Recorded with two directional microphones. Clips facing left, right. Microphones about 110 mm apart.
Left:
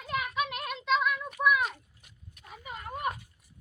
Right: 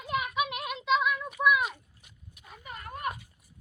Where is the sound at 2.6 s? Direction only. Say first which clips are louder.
Left 2 dB; 20° left (ahead or behind).